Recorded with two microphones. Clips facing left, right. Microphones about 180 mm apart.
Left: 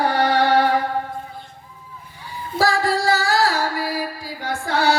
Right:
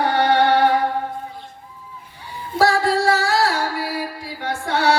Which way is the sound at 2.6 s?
65° right (ahead or behind).